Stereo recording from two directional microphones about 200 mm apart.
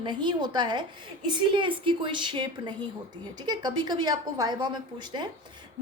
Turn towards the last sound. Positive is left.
turn(degrees=-20)  # may be behind; listen again after turning